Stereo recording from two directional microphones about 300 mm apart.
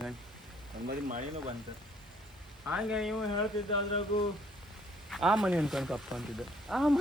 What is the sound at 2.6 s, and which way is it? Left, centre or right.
Speech, centre.